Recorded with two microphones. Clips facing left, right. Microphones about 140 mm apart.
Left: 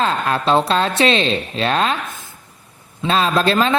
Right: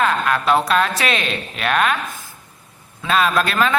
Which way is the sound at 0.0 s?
30° left (ahead or behind).